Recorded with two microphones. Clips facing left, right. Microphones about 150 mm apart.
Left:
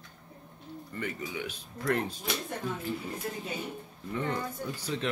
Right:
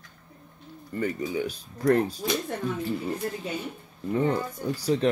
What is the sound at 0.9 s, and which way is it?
Speech, 35° right (ahead or behind).